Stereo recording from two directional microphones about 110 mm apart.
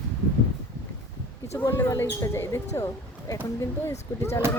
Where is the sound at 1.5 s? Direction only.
20° left (ahead or behind).